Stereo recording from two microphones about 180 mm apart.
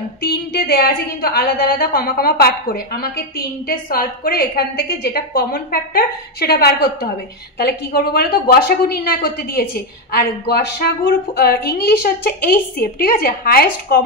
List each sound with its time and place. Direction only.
0.2 s a woman's voice: 60° left (ahead or behind)